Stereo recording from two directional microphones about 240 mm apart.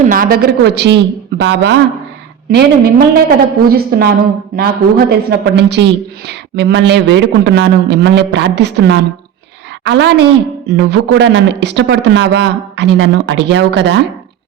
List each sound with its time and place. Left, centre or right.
0.0 s a woman's voice: right